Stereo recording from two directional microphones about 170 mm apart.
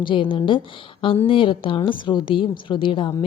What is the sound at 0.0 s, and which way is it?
Speech, 30° left (ahead or behind).